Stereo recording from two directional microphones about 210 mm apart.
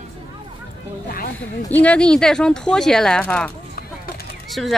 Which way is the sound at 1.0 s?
45° left (ahead or behind).